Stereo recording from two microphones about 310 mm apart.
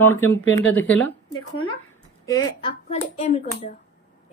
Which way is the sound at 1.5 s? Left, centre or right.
Left.